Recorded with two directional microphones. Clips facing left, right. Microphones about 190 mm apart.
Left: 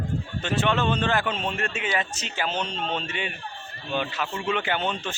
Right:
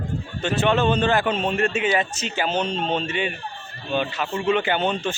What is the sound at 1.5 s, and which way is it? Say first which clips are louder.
Speech: right 7 dB; 5° right (ahead or behind).